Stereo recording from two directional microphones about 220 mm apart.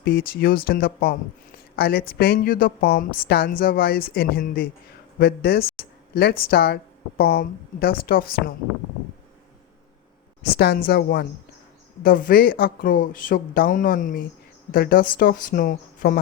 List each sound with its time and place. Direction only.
0.0 s a woman's voice: 45° left (ahead or behind)
5.7 s a sound: 45° left (ahead or behind)
6.5 s a woman's voice: 45° left (ahead or behind)
10.4 s a woman's voice: 45° left (ahead or behind)